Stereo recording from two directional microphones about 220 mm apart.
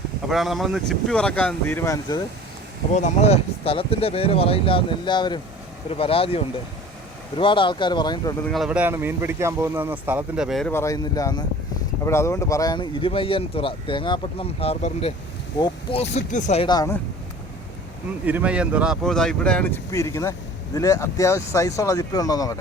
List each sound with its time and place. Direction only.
0.3 s speech: centre (ahead or behind); by 2.2 s 15° left (ahead or behind)
2.9 s speech: 30° left (ahead or behind)
8.4 s speech: centre (ahead or behind)
10.7 s speech: 15° left (ahead or behind)
16.1 s speech: 35° left (ahead or behind); by 17.0 s 15° left (ahead or behind)
18.3 s speech: 5° right (ahead or behind); by 22.5 s 15° left (ahead or behind)